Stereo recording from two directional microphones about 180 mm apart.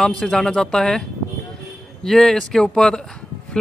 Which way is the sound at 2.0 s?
5° left (ahead or behind).